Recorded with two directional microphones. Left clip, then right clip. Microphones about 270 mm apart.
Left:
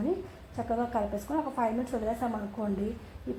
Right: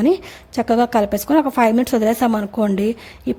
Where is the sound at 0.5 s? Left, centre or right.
Right.